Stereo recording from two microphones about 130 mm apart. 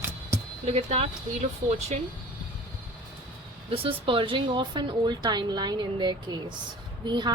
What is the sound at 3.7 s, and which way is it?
Speech, 45° right (ahead or behind).